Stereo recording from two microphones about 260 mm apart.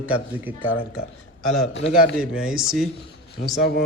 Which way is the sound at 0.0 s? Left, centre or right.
Centre.